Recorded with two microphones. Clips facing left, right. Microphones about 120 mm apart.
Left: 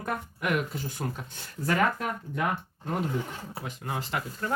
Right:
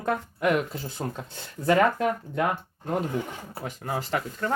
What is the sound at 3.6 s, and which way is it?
Speech, 40° right (ahead or behind).